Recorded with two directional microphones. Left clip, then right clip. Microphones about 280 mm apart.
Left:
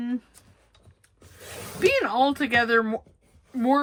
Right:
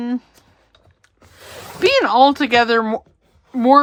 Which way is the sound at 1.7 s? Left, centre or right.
Centre.